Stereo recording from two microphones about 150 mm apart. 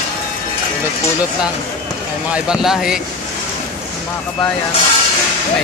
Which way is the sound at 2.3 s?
5° right (ahead or behind).